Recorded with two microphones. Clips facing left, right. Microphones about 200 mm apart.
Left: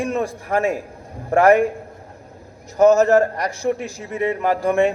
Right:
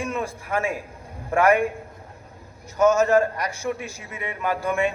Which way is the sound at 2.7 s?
35° left (ahead or behind).